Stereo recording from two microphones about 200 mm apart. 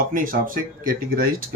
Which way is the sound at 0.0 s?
45° right (ahead or behind).